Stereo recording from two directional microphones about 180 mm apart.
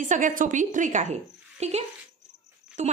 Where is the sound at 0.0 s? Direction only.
45° right (ahead or behind).